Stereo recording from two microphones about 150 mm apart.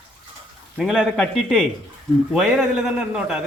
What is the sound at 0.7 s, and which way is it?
A man's voice, 5° right (ahead or behind).